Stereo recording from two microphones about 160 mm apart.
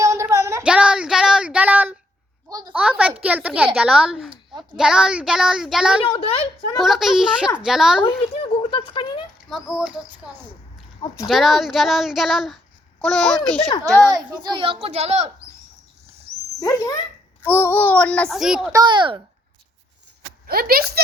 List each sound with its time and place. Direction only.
0.0 s child singing: 20° right (ahead or behind)
0.6 s child singing: 5° right (ahead or behind)
2.5 s a sound: 25° right (ahead or behind)
2.7 s a sound: 5° right (ahead or behind)
3.2 s speech: 10° right (ahead or behind)
6.1 s a woman's voice: 35° left (ahead or behind)
6.7 s speech: centre (ahead or behind)
8.2 s a sound: 35° left (ahead or behind)
9.5 s speech: centre (ahead or behind)
14.4 s speech: 30° right (ahead or behind)
16.6 s a child's voice: 20° left (ahead or behind); by 18.7 s 5° right (ahead or behind)
18.7 s a child's voice: 25° right (ahead or behind)
20.5 s speech: 70° right (ahead or behind)